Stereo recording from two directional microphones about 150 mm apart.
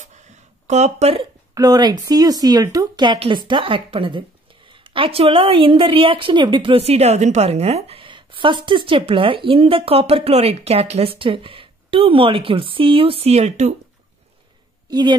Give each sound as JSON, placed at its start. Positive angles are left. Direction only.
{"t": 0.0, "sound": "a sound", "side_deg": -50}
{"t": 1.5, "sound": "a woman's voice", "side_deg": -25}
{"t": 14.9, "sound": "a woman's voice", "side_deg": -30}